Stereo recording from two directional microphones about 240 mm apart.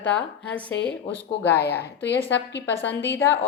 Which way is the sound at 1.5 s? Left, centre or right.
Left.